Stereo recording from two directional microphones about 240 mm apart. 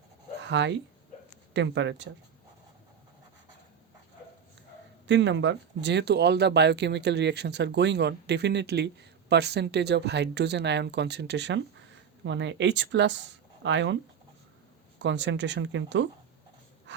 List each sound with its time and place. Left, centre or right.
0.4 s speech: right
5.0 s speech: right
15.0 s speech: right